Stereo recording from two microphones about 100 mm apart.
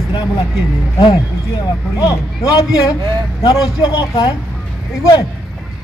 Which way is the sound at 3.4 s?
40° left (ahead or behind).